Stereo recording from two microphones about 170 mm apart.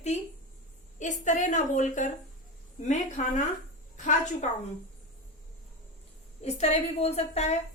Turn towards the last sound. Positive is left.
turn(degrees=40)  # may be behind; listen again after turning